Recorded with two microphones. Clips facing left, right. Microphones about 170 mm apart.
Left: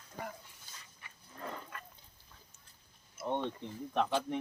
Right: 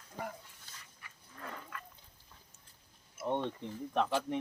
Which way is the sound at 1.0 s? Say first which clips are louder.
Even; 25° left (ahead or behind).